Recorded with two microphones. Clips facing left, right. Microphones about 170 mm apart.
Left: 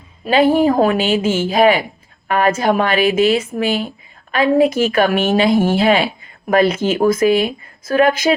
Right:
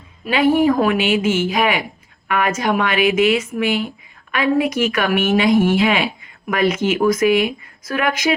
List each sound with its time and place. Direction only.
0.3 s speech: 30° left (ahead or behind)